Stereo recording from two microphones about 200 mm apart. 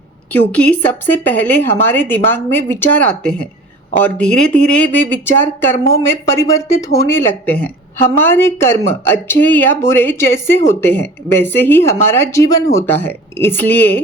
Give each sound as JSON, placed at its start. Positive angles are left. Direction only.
{"t": 0.5, "sound": "speech", "side_deg": 5}